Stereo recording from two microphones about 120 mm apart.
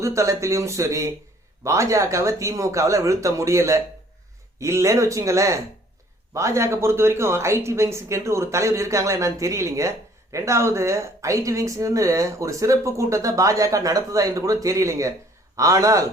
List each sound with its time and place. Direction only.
0.0 s speech: 25° right (ahead or behind)